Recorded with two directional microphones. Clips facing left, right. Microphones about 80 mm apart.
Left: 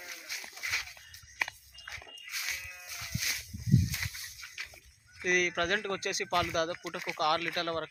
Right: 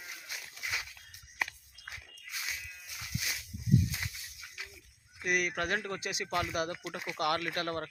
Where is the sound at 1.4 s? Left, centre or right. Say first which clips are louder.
Even; right.